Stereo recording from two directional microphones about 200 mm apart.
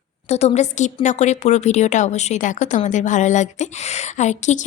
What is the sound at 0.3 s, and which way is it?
A woman's voice, 30° left (ahead or behind).